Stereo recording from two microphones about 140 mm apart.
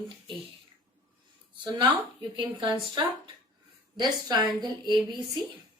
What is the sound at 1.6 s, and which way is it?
A woman's voice, 35° right (ahead or behind).